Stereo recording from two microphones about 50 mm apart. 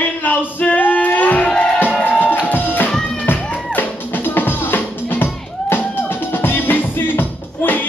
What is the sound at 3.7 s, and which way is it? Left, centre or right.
Drum, left.